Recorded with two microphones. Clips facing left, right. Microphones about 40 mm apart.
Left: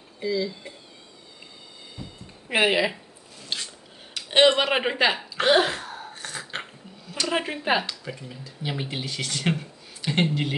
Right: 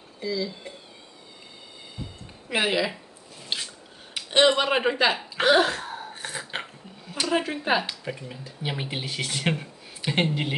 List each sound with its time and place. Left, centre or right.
0.2 s speech: centre
2.5 s speech: centre
3.4 s a sound: centre
4.3 s speech: centre
5.9 s a sound: centre
7.2 s speech: centre
7.8 s speech: centre